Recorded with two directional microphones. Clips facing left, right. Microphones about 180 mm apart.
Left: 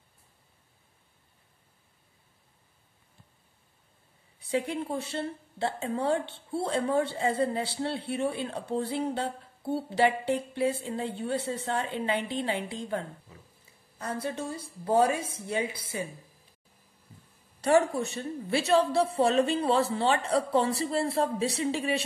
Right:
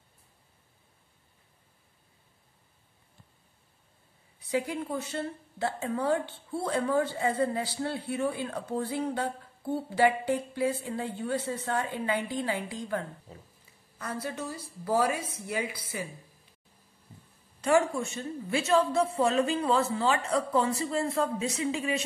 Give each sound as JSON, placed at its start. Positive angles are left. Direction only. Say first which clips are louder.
{"t": 4.4, "sound": "a woman's voice", "louder": "left 1 dB", "side_deg": 30}
{"t": 13.3, "sound": "a sound", "louder": "right 4 dB", "side_deg": -30}
{"t": 13.9, "sound": "a woman's voice", "louder": "left 2 dB", "side_deg": 30}
{"t": 17.6, "sound": "a woman's voice", "louder": "left 1 dB", "side_deg": 35}